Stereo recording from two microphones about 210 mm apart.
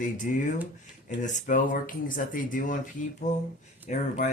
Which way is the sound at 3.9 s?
40° left (ahead or behind).